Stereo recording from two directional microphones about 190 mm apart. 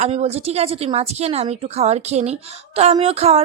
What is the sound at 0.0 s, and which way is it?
Speech, 35° right (ahead or behind).